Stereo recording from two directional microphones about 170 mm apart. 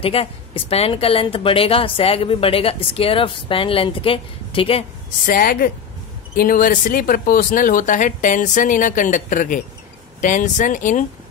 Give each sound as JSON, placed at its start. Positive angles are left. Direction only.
{"t": 0.0, "sound": "a woman's voice", "side_deg": 35}
{"t": 5.2, "sound": "a woman's voice", "side_deg": 60}